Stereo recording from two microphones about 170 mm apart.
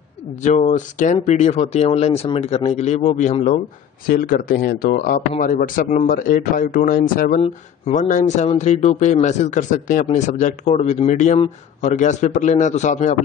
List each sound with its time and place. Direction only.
0.4 s speech: 45° left (ahead or behind)
7.3 s speech: 40° left (ahead or behind)